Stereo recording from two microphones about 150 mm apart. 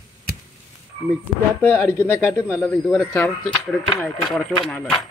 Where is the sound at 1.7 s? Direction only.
15° left (ahead or behind).